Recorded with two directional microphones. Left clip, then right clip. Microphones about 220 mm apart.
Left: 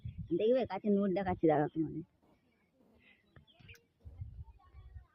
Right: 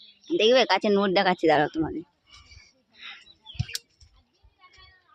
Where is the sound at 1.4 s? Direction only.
10° right (ahead or behind).